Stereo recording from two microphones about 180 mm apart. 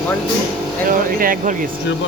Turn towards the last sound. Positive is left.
turn(degrees=-50)  # may be behind; listen again after turning